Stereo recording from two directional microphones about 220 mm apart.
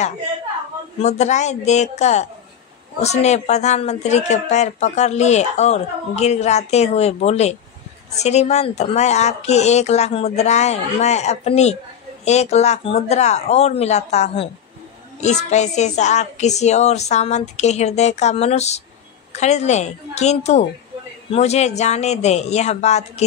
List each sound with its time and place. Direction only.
0.9 s speech: 30° left (ahead or behind)